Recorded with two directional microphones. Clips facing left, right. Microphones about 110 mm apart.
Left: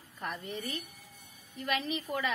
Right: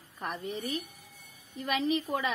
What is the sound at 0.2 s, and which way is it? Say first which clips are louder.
A woman's voice: right 3 dB; 20° right (ahead or behind).